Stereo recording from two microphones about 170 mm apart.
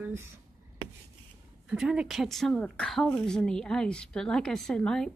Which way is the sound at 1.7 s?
5° right (ahead or behind).